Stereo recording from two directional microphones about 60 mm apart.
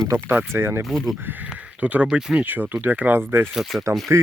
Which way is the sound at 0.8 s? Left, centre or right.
Centre.